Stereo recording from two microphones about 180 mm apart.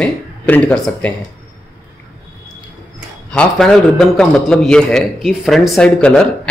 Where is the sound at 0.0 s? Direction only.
5° left (ahead or behind).